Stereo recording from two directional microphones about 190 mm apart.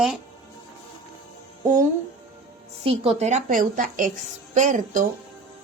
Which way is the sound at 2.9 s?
35° right (ahead or behind).